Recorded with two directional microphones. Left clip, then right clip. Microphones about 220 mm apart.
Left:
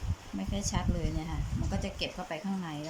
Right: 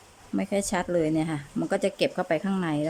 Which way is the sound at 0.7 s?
40° right (ahead or behind).